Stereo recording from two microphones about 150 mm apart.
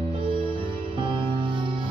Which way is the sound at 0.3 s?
35° right (ahead or behind).